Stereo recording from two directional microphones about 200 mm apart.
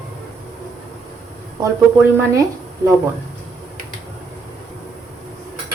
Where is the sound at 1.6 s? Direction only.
15° right (ahead or behind).